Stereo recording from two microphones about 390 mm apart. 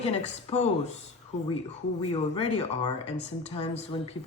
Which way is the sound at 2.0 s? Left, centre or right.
Centre.